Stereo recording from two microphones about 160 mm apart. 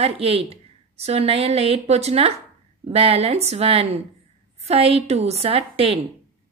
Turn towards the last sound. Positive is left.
turn(degrees=-35)  # may be behind; listen again after turning